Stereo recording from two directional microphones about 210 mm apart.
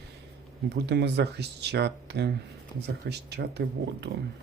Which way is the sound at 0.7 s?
55° right (ahead or behind).